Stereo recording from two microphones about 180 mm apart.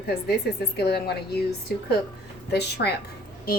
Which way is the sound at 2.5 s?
65° left (ahead or behind).